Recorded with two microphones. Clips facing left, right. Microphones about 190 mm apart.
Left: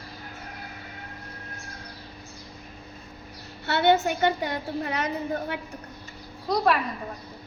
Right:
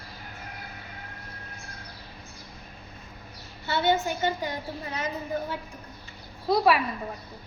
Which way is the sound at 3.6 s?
65° left (ahead or behind).